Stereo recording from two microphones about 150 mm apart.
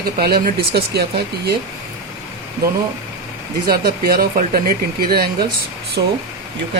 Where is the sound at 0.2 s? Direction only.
85° right.